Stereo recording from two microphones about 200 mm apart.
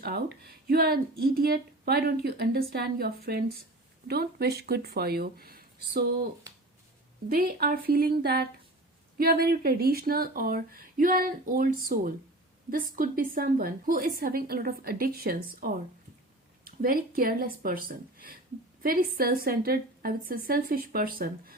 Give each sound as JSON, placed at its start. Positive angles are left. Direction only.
{"t": 0.0, "sound": "speech", "side_deg": -50}
{"t": 7.3, "sound": "speech", "side_deg": -45}